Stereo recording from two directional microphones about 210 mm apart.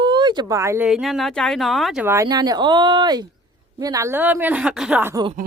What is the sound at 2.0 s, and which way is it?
A woman's voice, 15° right (ahead or behind).